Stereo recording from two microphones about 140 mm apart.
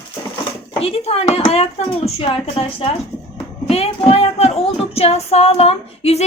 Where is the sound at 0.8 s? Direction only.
45° left (ahead or behind).